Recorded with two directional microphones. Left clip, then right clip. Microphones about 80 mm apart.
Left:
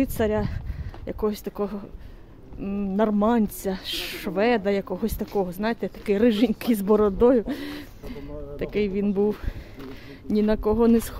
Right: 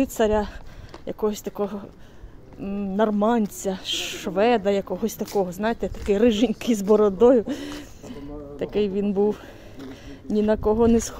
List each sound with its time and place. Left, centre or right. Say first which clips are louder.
0.0 s speech: right 3 dB; centre
1.0 s speech: right 1 dB; left